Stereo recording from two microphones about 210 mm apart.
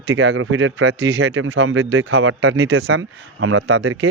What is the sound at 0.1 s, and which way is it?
Speech, 60° right (ahead or behind).